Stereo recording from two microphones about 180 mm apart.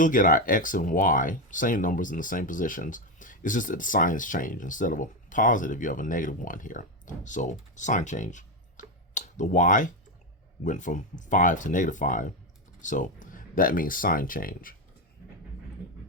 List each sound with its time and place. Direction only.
0.0 s speech: 50° left (ahead or behind)